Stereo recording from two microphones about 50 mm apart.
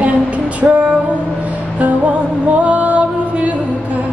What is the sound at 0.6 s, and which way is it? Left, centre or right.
Music, right.